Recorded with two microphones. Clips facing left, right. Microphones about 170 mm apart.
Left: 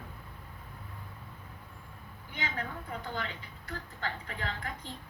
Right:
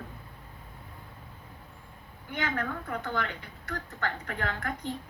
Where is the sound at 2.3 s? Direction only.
55° right (ahead or behind).